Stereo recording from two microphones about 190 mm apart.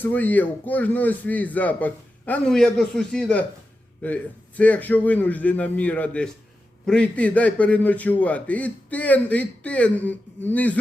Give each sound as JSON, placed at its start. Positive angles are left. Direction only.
{"t": 0.0, "sound": "a man's voice", "side_deg": 10}